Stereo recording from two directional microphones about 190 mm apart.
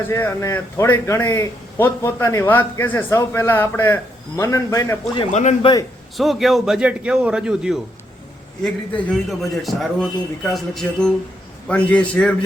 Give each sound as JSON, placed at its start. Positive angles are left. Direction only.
{"t": 0.1, "sound": "a man's voice", "side_deg": 15}
{"t": 5.3, "sound": "a man's voice", "side_deg": 40}
{"t": 6.1, "sound": "speech", "side_deg": 0}
{"t": 9.4, "sound": "a man's voice", "side_deg": 0}